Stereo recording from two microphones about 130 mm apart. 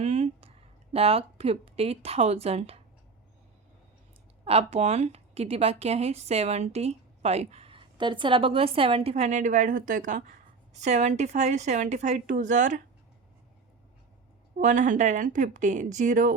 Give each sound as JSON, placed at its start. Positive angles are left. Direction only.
{"t": 0.0, "sound": "a sound", "side_deg": -50}
{"t": 0.9, "sound": "a woman's voice", "side_deg": -50}
{"t": 4.4, "sound": "a woman's voice", "side_deg": -50}
{"t": 10.8, "sound": "a woman's voice", "side_deg": -60}
{"t": 14.6, "sound": "speech", "side_deg": -75}